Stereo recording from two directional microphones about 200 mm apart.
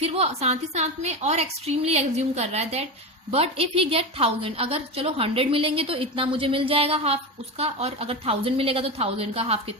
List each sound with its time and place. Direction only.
0.0 s a woman's voice: 30° right (ahead or behind)